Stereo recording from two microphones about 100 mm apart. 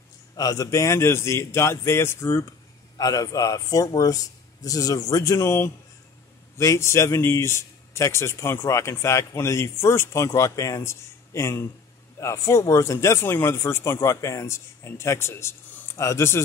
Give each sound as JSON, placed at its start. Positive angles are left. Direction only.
{"t": 0.4, "sound": "speech", "side_deg": 35}
{"t": 3.0, "sound": "a man's voice", "side_deg": 35}